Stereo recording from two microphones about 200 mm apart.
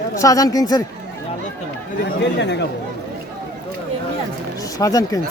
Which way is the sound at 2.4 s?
60° left (ahead or behind).